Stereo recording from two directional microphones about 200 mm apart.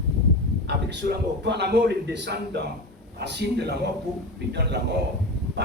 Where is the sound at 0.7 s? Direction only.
55° right (ahead or behind).